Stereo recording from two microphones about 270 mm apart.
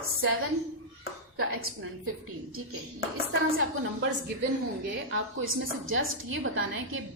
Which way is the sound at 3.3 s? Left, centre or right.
Right.